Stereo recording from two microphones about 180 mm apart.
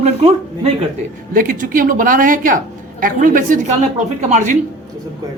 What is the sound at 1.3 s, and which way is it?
Speech, 50° right (ahead or behind).